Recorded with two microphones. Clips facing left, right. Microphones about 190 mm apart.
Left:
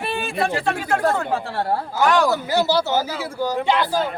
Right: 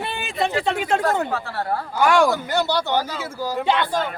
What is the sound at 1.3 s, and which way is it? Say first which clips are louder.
Speech: left 3 dB; 30° left (ahead or behind).